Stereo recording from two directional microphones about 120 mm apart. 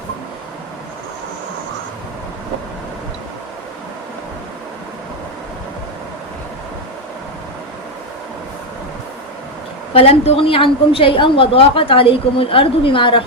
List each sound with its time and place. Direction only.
9.9 s a woman's voice: 55° left (ahead or behind)